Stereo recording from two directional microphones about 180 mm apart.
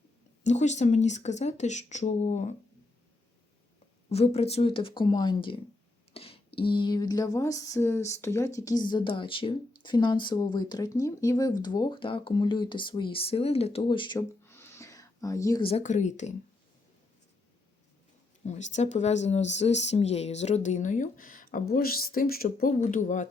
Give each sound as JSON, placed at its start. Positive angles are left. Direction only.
{"t": 0.4, "sound": "speech", "side_deg": 40}
{"t": 4.1, "sound": "speech", "side_deg": 35}
{"t": 6.1, "sound": "a sound", "side_deg": 30}
{"t": 6.6, "sound": "speech", "side_deg": 30}
{"t": 14.2, "sound": "a sound", "side_deg": 15}
{"t": 15.6, "sound": "speech", "side_deg": 40}
{"t": 18.4, "sound": "speech", "side_deg": 40}
{"t": 22.8, "sound": "speech", "side_deg": 45}